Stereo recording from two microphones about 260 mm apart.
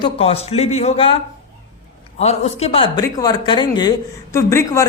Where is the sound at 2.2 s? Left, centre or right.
Left.